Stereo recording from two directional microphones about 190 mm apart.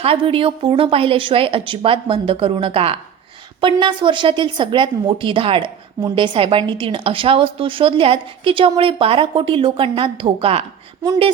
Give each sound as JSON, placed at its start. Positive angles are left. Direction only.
{"t": 0.0, "sound": "a woman's voice", "side_deg": -30}